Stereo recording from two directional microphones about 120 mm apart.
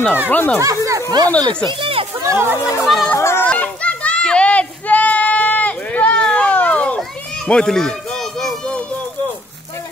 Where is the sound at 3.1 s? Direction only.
20° left (ahead or behind).